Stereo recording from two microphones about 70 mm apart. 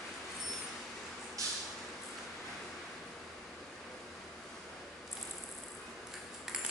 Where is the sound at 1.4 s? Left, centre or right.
Right.